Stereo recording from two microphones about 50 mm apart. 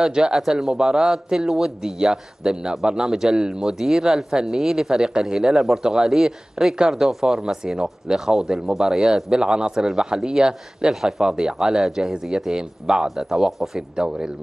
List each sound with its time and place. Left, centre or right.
0.0 s speech: centre
3.6 s speech: centre